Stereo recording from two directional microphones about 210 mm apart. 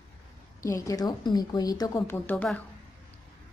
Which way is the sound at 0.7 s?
15° left (ahead or behind).